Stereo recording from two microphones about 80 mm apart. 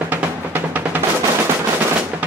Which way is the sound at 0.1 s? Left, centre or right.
Right.